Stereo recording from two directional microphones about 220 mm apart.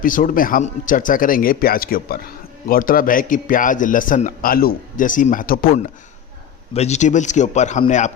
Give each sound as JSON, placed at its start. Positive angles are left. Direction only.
{"t": 0.0, "sound": "speech", "side_deg": 40}